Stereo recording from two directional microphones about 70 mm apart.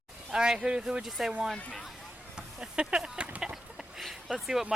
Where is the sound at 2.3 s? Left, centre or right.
Centre.